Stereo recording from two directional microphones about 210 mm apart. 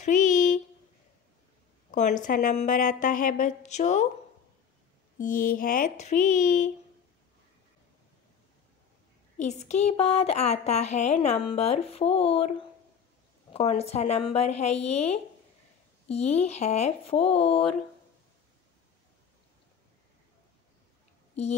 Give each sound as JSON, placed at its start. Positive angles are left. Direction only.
{"t": 0.0, "sound": "a sound", "side_deg": 35}
{"t": 1.9, "sound": "a woman's voice", "side_deg": 35}
{"t": 5.2, "sound": "a woman's voice", "side_deg": 40}
{"t": 9.4, "sound": "a woman's voice", "side_deg": 35}